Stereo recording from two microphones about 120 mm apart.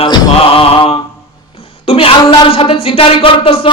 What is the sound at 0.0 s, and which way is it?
Mantra, 50° left (ahead or behind).